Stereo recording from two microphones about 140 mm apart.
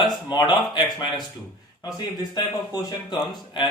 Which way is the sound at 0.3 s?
30° left (ahead or behind).